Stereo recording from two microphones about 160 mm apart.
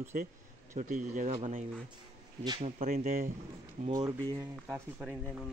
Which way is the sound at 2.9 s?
60° right (ahead or behind).